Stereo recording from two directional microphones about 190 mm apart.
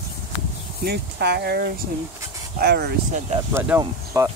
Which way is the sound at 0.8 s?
60° right (ahead or behind).